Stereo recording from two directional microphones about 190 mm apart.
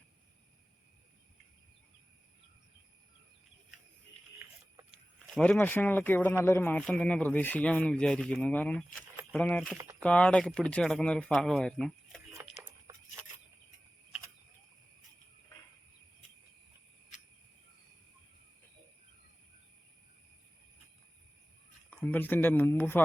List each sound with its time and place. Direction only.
4.9 s speech: centre (ahead or behind)
9.7 s speech: 15° right (ahead or behind)
10.0 s speech: 5° left (ahead or behind)
21.8 s speech: 10° left (ahead or behind)